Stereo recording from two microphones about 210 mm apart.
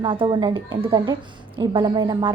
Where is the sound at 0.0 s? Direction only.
25° right (ahead or behind).